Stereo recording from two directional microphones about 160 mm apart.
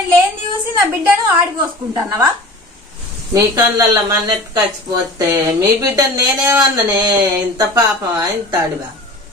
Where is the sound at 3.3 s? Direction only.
20° right (ahead or behind).